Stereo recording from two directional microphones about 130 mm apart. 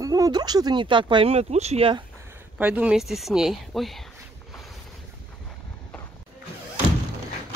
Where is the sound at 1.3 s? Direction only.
55° right (ahead or behind).